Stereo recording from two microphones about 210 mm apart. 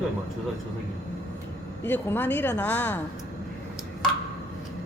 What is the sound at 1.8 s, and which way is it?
Speech, 10° left (ahead or behind).